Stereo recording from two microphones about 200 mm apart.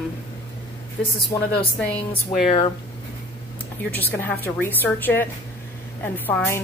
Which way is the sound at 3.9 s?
10° left (ahead or behind).